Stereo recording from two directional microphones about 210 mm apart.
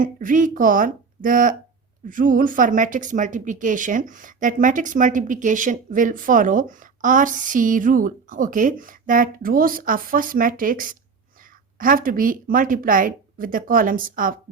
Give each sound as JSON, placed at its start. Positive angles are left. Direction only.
{"t": 0.0, "sound": "speech", "side_deg": -40}